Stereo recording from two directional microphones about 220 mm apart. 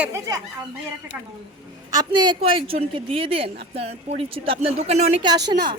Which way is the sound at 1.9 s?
20° right (ahead or behind).